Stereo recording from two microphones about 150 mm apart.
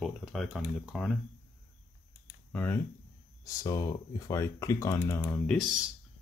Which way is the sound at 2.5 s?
15° left (ahead or behind).